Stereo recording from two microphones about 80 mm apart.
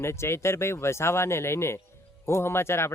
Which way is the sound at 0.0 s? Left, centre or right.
Left.